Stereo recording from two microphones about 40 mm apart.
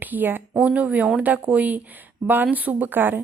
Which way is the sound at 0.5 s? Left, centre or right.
Right.